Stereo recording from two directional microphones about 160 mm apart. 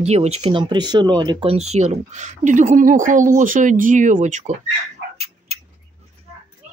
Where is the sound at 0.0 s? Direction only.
40° right (ahead or behind).